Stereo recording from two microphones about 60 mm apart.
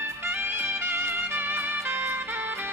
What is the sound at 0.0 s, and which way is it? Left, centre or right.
Music, right.